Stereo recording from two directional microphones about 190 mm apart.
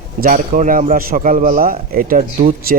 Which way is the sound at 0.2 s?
45° right (ahead or behind).